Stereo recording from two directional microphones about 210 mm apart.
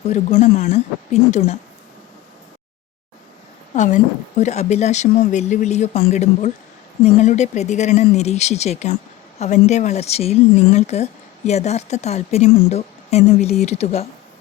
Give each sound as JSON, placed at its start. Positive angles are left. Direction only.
{"t": 0.1, "sound": "speech", "side_deg": 30}
{"t": 3.8, "sound": "speech", "side_deg": 35}